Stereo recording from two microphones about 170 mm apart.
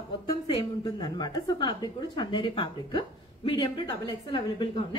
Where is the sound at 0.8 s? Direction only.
25° left (ahead or behind).